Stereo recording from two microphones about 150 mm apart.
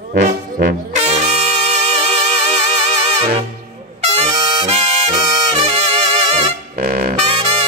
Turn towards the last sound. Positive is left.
turn(degrees=-35)  # may be behind; listen again after turning